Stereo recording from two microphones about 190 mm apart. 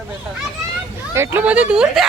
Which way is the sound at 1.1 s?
10° right (ahead or behind).